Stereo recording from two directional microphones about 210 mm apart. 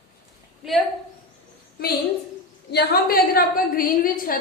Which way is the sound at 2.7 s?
50° left (ahead or behind).